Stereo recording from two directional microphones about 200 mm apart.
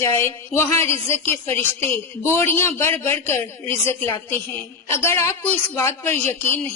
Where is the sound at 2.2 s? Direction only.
10° left (ahead or behind).